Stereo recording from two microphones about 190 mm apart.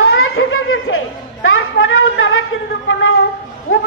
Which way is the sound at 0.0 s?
90° left.